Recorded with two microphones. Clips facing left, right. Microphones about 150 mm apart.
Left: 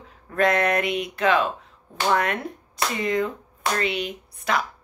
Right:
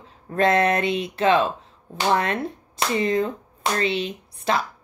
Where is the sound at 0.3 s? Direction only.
30° right (ahead or behind).